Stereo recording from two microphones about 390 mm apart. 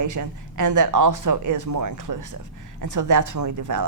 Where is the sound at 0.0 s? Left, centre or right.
Right.